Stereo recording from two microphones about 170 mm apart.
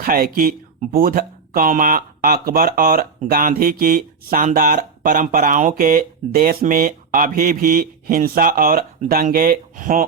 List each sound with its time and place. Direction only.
0.0 s speech: 60° right (ahead or behind)